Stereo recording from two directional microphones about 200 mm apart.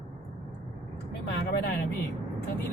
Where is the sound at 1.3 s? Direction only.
55° left (ahead or behind).